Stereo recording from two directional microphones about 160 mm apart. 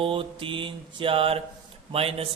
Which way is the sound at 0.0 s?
35° right (ahead or behind).